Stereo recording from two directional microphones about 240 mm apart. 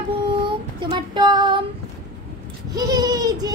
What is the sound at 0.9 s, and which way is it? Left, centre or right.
Music, centre.